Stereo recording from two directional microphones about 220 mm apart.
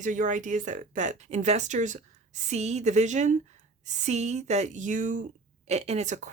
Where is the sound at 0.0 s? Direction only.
35° right (ahead or behind).